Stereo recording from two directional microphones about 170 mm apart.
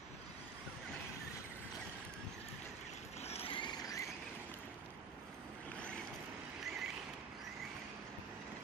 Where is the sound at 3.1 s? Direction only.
40° left (ahead or behind); by 4.1 s 20° left (ahead or behind).